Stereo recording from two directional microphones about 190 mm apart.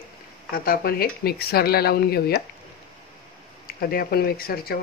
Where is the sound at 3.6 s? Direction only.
50° left (ahead or behind).